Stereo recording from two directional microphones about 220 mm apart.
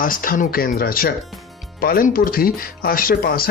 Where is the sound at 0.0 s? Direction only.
40° left (ahead or behind).